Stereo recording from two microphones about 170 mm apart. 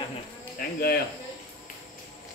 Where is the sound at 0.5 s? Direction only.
60° left (ahead or behind).